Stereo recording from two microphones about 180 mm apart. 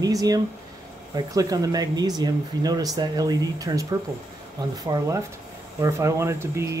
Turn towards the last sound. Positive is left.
turn(degrees=-15)  # may be behind; listen again after turning